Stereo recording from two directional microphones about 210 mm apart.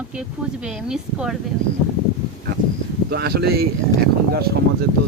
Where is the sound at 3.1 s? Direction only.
50° right (ahead or behind).